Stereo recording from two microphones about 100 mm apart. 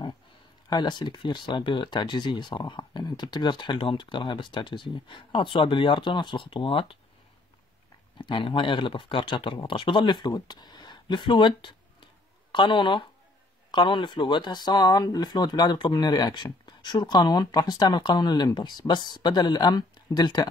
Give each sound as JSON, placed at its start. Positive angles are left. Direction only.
{"t": 0.7, "sound": "speech", "side_deg": 45}
{"t": 8.2, "sound": "speech", "side_deg": 60}